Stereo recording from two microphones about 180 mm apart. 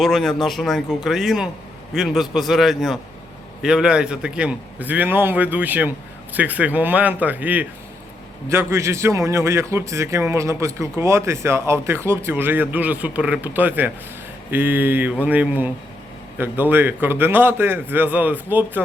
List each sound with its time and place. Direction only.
0.0 s a man's voice: centre (ahead or behind)